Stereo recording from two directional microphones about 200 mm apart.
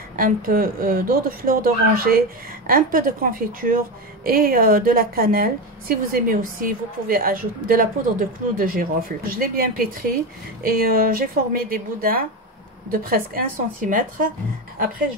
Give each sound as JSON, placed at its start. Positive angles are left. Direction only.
{"t": 0.1, "sound": "speech", "side_deg": -45}